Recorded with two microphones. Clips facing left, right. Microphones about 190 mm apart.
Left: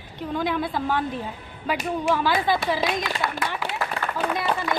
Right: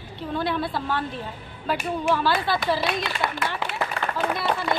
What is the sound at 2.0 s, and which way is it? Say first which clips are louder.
Speech: left 1 dB; 15° left (ahead or behind).